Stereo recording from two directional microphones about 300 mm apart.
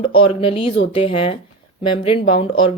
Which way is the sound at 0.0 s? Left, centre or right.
Centre.